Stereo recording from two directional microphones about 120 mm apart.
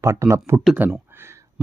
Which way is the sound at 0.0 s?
25° right (ahead or behind).